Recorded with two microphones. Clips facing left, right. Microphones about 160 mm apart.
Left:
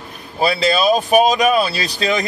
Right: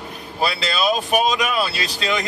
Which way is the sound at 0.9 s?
40° left (ahead or behind).